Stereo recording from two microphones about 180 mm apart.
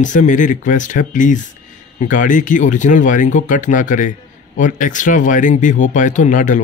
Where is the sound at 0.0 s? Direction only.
45° left (ahead or behind).